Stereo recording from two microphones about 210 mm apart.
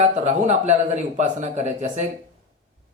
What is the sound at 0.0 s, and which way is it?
A man's voice, 30° right (ahead or behind).